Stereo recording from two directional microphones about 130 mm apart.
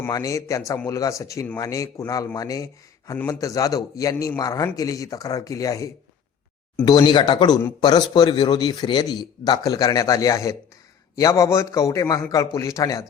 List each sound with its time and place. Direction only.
0.1 s a man's voice: 25° left (ahead or behind)
6.8 s a man's voice: 35° left (ahead or behind)